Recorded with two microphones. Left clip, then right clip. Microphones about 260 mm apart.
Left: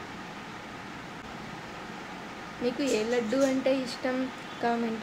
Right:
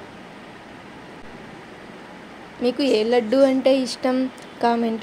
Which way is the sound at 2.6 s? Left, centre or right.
Right.